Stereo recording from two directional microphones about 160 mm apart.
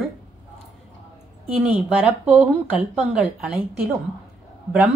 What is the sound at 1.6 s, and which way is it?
A woman's voice, 10° right (ahead or behind).